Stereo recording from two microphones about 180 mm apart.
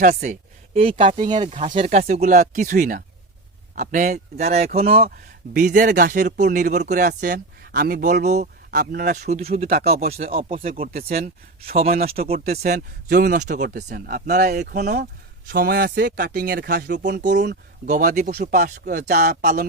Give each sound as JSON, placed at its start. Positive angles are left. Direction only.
{"t": 0.0, "sound": "speech", "side_deg": -45}
{"t": 0.8, "sound": "speech", "side_deg": -30}
{"t": 5.5, "sound": "speech", "side_deg": -50}
{"t": 8.2, "sound": "speech", "side_deg": -40}
{"t": 9.8, "sound": "speech", "side_deg": -35}
{"t": 10.2, "sound": "speech", "side_deg": -50}
{"t": 17.3, "sound": "speech", "side_deg": -75}
{"t": 17.8, "sound": "speech", "side_deg": -45}